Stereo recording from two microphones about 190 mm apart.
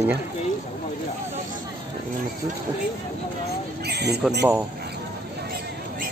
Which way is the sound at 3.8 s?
60° right (ahead or behind).